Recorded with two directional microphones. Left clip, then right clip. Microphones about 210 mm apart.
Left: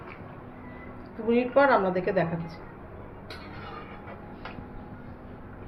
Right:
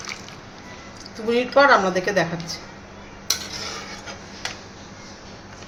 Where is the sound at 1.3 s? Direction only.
25° right (ahead or behind).